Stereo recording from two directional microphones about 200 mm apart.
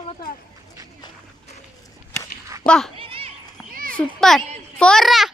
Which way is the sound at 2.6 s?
5° left (ahead or behind).